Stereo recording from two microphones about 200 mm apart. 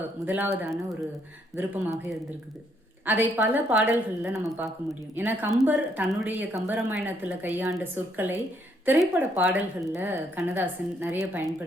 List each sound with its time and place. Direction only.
0.3 s a woman's voice: 10° right (ahead or behind)
3.1 s a woman's voice: 10° right (ahead or behind)